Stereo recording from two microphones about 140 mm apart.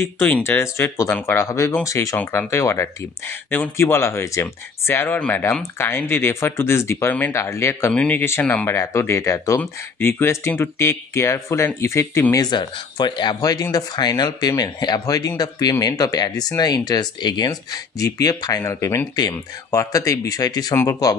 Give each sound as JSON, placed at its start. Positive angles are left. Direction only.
{"t": 0.2, "sound": "speech", "side_deg": 15}